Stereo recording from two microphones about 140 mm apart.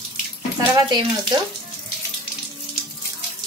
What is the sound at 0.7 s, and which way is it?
Speech, 30° right (ahead or behind).